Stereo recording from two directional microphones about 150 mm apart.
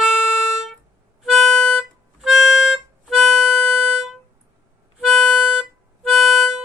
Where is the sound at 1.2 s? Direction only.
Centre (ahead or behind).